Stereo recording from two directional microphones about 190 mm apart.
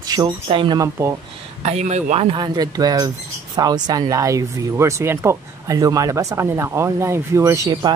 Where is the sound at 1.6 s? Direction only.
35° right (ahead or behind).